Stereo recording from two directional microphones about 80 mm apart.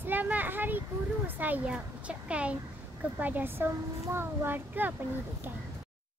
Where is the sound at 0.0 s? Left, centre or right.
Right.